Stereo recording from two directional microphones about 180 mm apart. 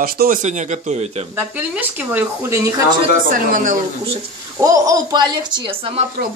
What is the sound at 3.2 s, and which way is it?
Speech, 45° right (ahead or behind).